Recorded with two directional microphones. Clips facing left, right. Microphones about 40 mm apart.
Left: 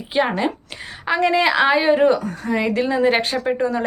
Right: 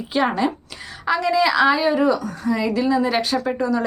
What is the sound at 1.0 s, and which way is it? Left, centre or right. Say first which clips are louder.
Speech: left 1 dB; left.